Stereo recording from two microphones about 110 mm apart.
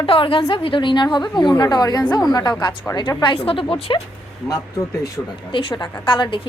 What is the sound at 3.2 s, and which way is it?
Speech, 50° left (ahead or behind).